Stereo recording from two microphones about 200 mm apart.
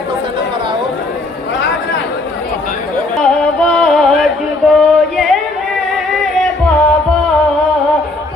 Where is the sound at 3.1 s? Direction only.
5° left (ahead or behind).